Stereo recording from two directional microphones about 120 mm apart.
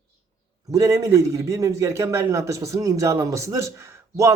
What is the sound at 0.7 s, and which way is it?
A man's voice, 25° right (ahead or behind).